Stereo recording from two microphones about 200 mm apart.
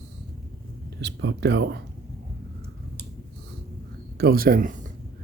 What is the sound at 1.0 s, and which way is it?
Speech, 60° right (ahead or behind).